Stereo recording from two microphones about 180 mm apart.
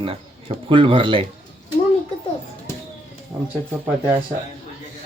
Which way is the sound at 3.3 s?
10° right (ahead or behind).